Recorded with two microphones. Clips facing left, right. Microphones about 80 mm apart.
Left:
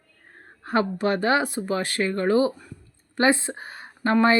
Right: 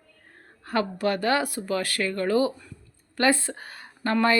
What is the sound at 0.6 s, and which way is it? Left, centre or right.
A woman's voice, left.